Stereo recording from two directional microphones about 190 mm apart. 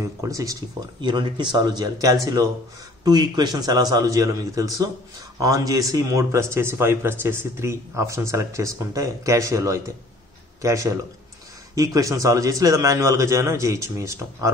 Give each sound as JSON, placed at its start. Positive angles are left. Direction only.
{"t": 0.0, "sound": "a man's voice", "side_deg": -15}